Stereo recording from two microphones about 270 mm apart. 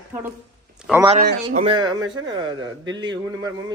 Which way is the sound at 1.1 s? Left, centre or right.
Right.